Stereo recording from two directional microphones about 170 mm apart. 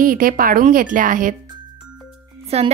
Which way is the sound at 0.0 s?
55° right (ahead or behind).